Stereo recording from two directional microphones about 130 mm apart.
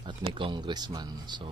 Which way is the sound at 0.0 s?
40° right (ahead or behind).